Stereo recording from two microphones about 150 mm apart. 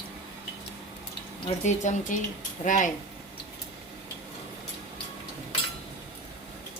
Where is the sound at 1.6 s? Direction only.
55° left (ahead or behind).